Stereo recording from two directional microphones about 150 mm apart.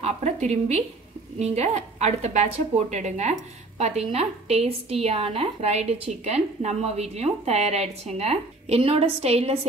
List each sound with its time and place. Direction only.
0.0 s a woman's voice: 50° right (ahead or behind)